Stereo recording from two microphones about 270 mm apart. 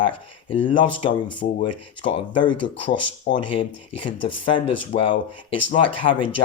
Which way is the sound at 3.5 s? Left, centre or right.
Centre.